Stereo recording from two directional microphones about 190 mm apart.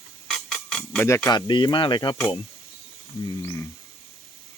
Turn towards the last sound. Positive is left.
turn(degrees=15)  # may be behind; listen again after turning